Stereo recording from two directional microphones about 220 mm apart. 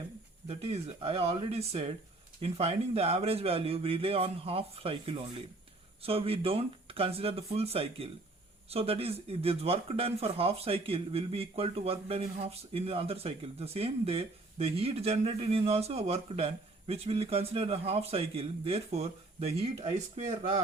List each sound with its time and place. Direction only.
0.4 s speech: 30° right (ahead or behind)